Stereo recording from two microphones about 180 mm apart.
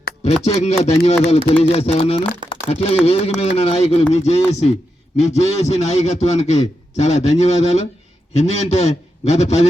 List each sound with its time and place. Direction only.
0.3 s a man's voice: 35° left (ahead or behind)
2.5 s a sound: 35° left (ahead or behind)
3.0 s a man's voice: 35° left (ahead or behind)